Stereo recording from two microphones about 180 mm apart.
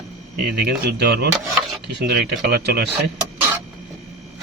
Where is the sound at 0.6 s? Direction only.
60° right (ahead or behind).